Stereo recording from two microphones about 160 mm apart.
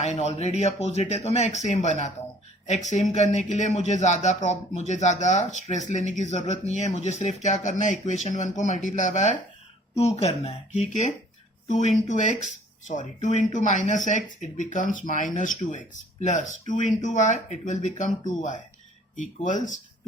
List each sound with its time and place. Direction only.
0.0 s speech: 45° left (ahead or behind)
13.5 s speech: 50° left (ahead or behind)